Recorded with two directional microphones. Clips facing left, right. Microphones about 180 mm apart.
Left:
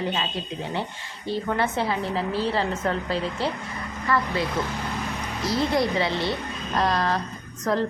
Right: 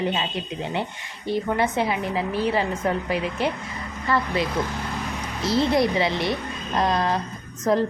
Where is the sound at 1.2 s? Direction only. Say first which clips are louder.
Right 2 dB; 15° right (ahead or behind).